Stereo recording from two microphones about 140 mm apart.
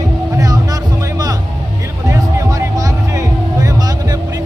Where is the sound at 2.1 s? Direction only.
25° right (ahead or behind).